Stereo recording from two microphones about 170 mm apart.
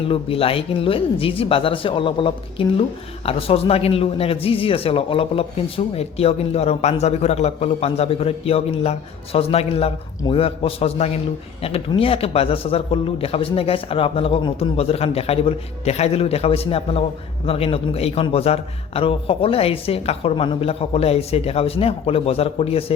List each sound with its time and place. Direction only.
0.1 s speech: 35° left (ahead or behind)